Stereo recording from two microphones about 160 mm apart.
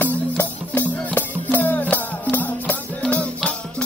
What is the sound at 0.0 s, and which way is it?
Music, 10° left (ahead or behind).